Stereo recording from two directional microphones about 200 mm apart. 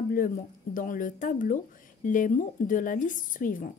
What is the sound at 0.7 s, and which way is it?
A woman's voice, 40° left (ahead or behind).